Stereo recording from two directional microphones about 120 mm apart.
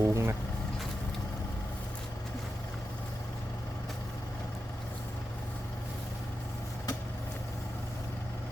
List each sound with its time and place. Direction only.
0.0 s vehicle: 25° right (ahead or behind)